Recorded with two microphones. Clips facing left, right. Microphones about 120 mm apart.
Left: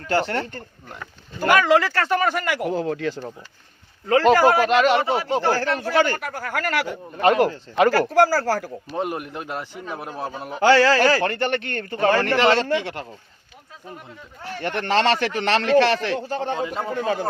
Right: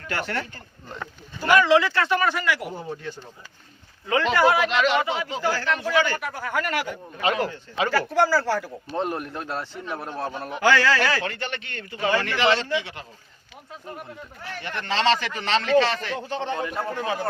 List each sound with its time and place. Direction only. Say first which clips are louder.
0.1 s a man's voice: left 7 dB; 30° left (ahead or behind)
1.4 s a man's voice: left 1 dB; 50° left (ahead or behind)
2.6 s speech: left 9 dB; 85° left
4.0 s a man's voice: left 5 dB; 40° left (ahead or behind)
8.9 s a man's voice: even; 10° left (ahead or behind)
10.5 s a man's voice: left 5 dB; 30° left (ahead or behind); by 13.1 s 55° left (ahead or behind)
14.6 s a man's voice: left 4 dB; 55° left (ahead or behind); by 16.1 s 70° left (ahead or behind)
16.3 s a man's voice: left 3 dB; 40° left (ahead or behind)
16.6 s a man's voice: left 2 dB; 20° left (ahead or behind)